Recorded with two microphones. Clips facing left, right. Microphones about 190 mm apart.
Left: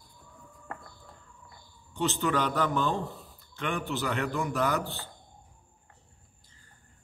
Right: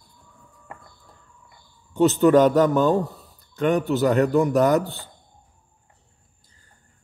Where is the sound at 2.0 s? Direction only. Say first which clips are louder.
Right 13 dB; 45° right (ahead or behind).